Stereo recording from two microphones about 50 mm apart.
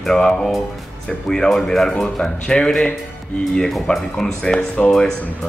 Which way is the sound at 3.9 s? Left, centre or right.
Left.